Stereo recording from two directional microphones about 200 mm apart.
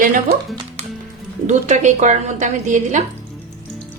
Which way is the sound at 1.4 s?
35° right (ahead or behind).